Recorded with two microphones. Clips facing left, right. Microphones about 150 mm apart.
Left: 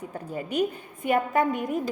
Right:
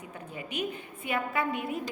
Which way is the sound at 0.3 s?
40° left (ahead or behind).